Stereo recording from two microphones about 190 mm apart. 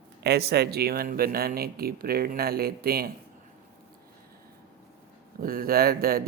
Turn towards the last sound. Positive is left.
turn(degrees=-50)  # may be behind; listen again after turning